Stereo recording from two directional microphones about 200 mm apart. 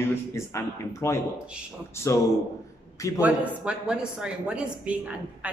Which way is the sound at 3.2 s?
5° right (ahead or behind).